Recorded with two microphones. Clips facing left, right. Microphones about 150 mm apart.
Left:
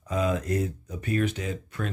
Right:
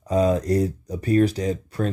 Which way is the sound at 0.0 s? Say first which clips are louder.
Right 7 dB; 35° right (ahead or behind).